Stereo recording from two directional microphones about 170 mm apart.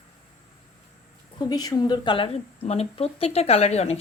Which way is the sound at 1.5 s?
20° left (ahead or behind).